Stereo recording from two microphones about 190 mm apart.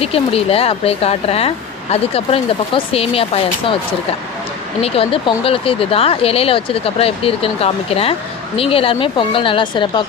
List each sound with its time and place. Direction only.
0.0 s speech: 30° left (ahead or behind)
4.8 s speech: 30° left (ahead or behind)